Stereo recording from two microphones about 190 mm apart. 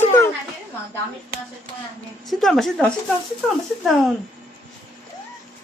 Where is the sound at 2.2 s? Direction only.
Centre (ahead or behind).